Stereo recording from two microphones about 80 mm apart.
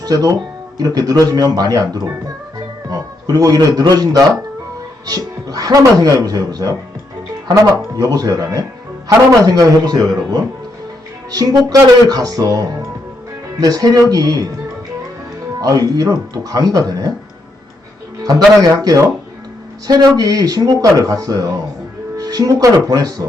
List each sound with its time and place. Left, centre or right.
0.0 s speech: right
15.6 s speech: right
18.2 s speech: right